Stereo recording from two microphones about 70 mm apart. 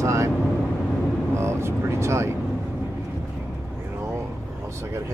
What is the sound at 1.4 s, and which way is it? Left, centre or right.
Speech, right.